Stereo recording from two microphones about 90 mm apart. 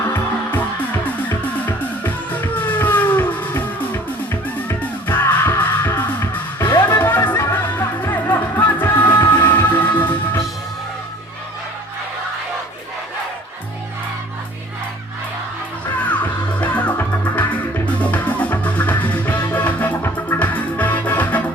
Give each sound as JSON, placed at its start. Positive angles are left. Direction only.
{"t": 0.0, "sound": "music", "side_deg": 20}
{"t": 16.0, "sound": "music", "side_deg": 15}